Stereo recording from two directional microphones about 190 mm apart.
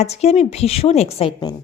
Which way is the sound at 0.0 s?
35° left (ahead or behind).